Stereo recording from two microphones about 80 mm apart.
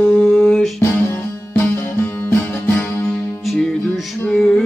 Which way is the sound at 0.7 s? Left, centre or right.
Left.